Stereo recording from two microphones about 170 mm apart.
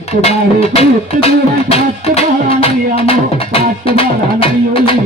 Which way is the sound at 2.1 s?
35° left (ahead or behind).